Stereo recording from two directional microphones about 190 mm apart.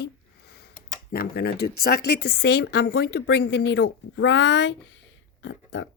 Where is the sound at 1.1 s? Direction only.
55° left (ahead or behind).